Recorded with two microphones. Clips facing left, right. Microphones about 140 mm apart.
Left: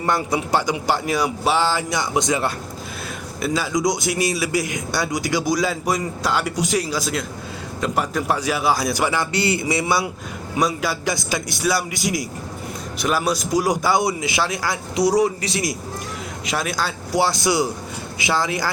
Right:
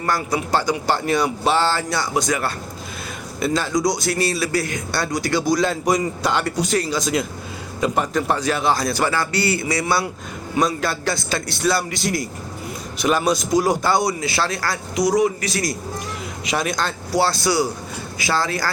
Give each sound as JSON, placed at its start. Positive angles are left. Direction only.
{"t": 0.0, "sound": "speech", "side_deg": 20}
{"t": 3.4, "sound": "speech", "side_deg": 5}
{"t": 3.8, "sound": "speech", "side_deg": 20}
{"t": 13.0, "sound": "speech", "side_deg": 0}
{"t": 14.9, "sound": "speech", "side_deg": 30}
{"t": 16.5, "sound": "speech", "side_deg": 0}
{"t": 17.1, "sound": "speech", "side_deg": 15}